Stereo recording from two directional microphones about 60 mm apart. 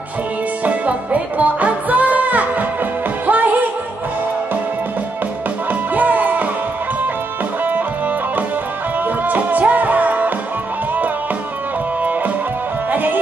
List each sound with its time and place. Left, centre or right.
0.7 s music: right
5.7 s music: right
9.0 s music: right
12.9 s music: right